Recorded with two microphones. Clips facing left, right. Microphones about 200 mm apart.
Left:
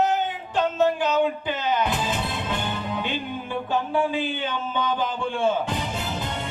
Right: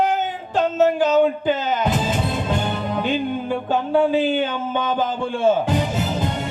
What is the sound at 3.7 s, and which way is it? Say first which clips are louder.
Speech: right 6 dB; 45° right (ahead or behind).